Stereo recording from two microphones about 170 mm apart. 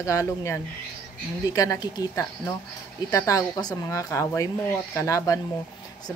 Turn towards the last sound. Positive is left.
turn(degrees=20)  # may be behind; listen again after turning